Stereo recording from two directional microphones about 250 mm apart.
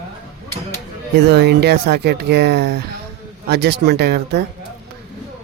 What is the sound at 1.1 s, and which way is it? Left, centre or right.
Speech, right.